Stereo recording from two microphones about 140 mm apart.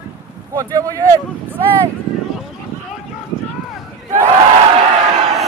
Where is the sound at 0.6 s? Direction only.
25° right (ahead or behind).